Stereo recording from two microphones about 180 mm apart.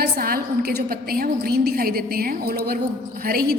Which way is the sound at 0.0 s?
55° right (ahead or behind).